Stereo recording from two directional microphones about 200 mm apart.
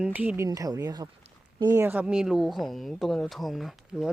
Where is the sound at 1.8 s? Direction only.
5° right (ahead or behind).